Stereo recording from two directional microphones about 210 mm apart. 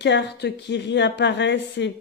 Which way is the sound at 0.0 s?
55° left (ahead or behind).